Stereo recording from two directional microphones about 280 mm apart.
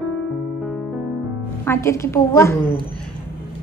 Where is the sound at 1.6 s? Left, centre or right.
Centre.